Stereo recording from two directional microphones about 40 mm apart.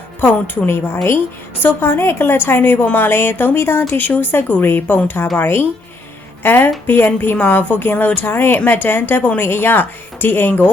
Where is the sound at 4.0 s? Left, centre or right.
Left.